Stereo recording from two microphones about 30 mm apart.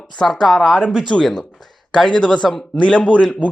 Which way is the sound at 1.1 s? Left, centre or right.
Left.